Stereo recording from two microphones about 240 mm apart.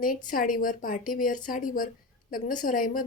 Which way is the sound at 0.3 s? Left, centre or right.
Left.